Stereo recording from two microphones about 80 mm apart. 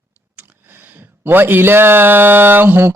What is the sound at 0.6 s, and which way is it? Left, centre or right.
Speech, right.